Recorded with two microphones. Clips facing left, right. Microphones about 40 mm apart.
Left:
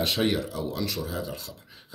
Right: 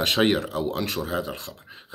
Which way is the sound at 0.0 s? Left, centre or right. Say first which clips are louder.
Right 4 dB; right.